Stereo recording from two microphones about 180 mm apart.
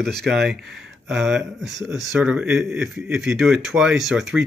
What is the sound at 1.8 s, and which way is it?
Speech, 20° left (ahead or behind).